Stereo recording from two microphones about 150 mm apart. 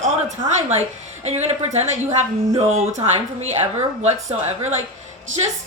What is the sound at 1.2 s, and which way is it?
A woman's voice, 45° right (ahead or behind).